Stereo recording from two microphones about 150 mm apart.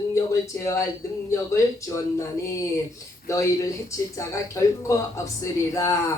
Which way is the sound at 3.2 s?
20° left (ahead or behind).